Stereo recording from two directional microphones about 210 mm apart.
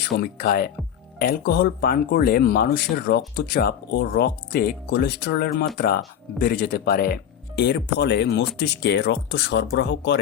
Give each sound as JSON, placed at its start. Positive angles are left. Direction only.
{"t": 0.0, "sound": "speech", "side_deg": 45}